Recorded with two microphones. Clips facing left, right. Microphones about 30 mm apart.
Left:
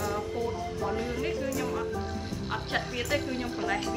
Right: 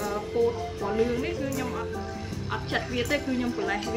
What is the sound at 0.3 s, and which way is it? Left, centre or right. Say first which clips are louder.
Speech: right 11 dB; right.